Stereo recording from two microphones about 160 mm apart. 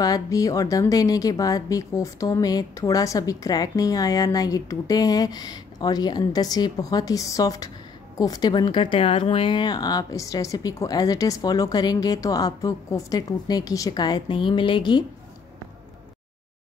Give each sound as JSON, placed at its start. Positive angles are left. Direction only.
{"t": 0.0, "sound": "a woman's voice", "side_deg": 20}